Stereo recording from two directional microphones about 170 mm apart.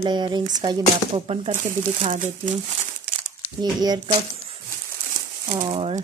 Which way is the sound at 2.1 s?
45° right (ahead or behind).